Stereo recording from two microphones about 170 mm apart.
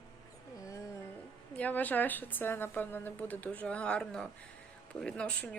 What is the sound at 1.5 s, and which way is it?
A woman's voice, 10° left (ahead or behind).